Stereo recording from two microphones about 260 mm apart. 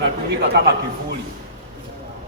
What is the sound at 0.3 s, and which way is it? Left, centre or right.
Speech, right.